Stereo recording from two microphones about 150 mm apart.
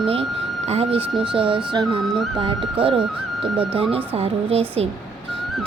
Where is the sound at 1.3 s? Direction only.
35° right (ahead or behind).